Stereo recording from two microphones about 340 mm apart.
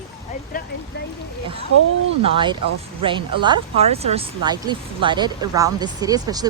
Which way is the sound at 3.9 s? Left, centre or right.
Centre.